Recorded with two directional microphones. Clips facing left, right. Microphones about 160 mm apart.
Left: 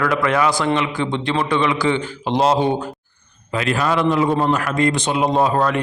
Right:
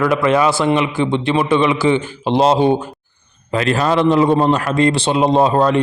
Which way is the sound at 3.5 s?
35° right (ahead or behind).